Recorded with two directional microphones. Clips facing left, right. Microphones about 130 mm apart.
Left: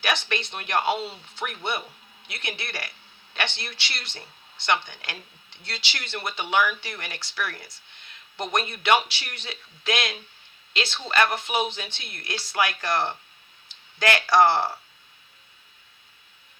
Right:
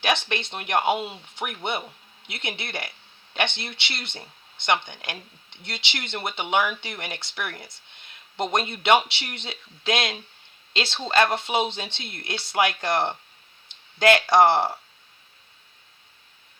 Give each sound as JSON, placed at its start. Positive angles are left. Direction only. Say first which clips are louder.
{"t": 0.0, "sound": "speech", "louder": "right 2 dB", "side_deg": -25}